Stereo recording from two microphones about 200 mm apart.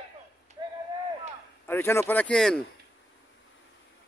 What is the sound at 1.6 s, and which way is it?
Speech, 10° left (ahead or behind).